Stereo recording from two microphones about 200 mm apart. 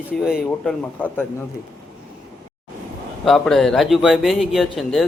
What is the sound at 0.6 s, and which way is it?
Speech, 5° left (ahead or behind).